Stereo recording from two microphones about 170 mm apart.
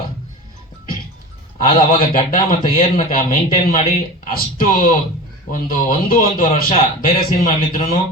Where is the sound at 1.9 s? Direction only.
50° left (ahead or behind).